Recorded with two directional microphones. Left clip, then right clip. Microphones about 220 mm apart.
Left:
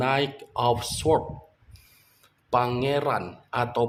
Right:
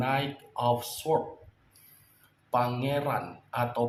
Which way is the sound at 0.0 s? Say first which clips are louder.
Left 5 dB; 45° left (ahead or behind).